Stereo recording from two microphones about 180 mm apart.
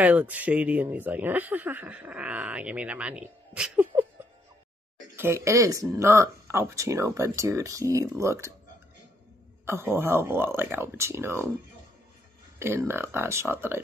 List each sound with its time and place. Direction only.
0.0 s speech: 10° right (ahead or behind)
5.1 s speech: 15° right (ahead or behind)
9.7 s speech: 15° right (ahead or behind)
12.5 s speech: 15° right (ahead or behind)